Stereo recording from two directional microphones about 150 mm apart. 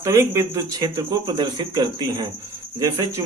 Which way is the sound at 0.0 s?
20° right (ahead or behind).